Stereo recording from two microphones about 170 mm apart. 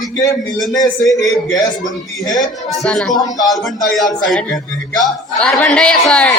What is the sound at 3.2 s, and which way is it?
Speech, 20° left (ahead or behind).